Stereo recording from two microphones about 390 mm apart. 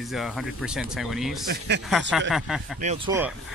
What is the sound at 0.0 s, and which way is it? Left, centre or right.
Speech, centre.